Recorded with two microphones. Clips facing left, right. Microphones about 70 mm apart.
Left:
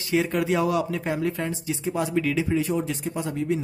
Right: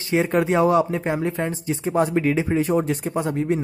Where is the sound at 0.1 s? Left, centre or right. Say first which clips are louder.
Right 4 dB; right.